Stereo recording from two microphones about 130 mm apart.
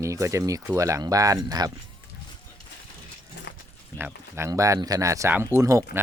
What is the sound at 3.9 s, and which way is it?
Speech, 15° right (ahead or behind).